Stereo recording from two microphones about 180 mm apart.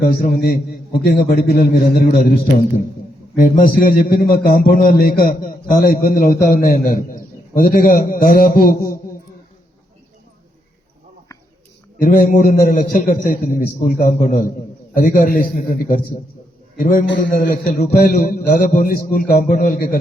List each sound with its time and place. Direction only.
0.2 s a man's voice: 55° left (ahead or behind)
3.3 s a man's voice: 50° left (ahead or behind)
11.9 s a man's voice: 50° left (ahead or behind)